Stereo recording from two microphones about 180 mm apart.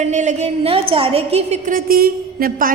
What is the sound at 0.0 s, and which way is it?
A woman's voice, 40° right (ahead or behind).